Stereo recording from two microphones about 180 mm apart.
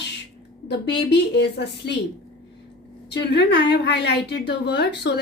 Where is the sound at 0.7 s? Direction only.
70° left (ahead or behind).